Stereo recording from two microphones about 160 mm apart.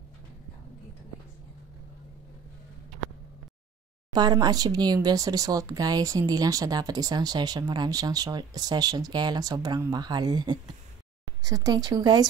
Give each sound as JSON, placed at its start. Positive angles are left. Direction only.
{"t": 4.1, "sound": "speech", "side_deg": -25}